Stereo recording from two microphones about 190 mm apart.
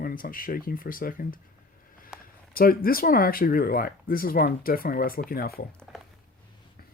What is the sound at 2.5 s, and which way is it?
Speech, 50° left (ahead or behind).